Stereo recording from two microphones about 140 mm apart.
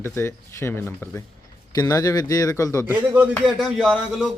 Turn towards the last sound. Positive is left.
turn(degrees=0)  # may be behind; listen again after turning